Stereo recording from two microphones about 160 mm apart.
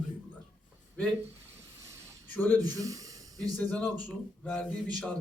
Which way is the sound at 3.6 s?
10° left (ahead or behind).